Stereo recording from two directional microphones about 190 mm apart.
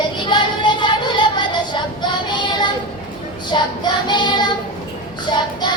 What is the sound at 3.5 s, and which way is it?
Child singing, 25° left (ahead or behind).